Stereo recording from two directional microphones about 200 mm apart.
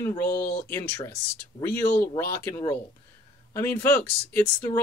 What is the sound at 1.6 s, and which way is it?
Speech, 10° left (ahead or behind).